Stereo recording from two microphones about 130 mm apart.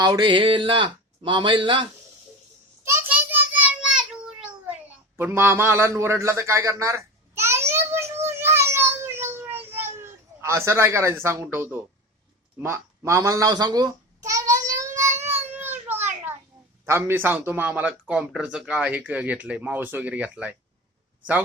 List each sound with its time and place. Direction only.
0.0 s speech: 30° right (ahead or behind)
2.8 s child singing: 15° right (ahead or behind)
5.1 s a sound: 15° right (ahead or behind)
11.5 s a child's voice: 15° right (ahead or behind)
14.9 s child singing: 20° right (ahead or behind)
15.4 s a sound: 15° right (ahead or behind)
16.8 s speech: 20° right (ahead or behind)